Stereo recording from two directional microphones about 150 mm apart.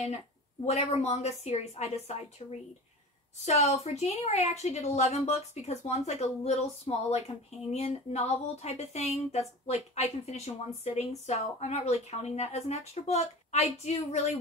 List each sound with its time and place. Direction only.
0.7 s a woman's voice: 45° left (ahead or behind)
3.4 s a woman's voice: 50° left (ahead or behind)